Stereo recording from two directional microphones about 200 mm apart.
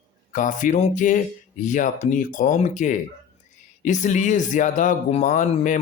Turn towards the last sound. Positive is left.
turn(degrees=40)  # may be behind; listen again after turning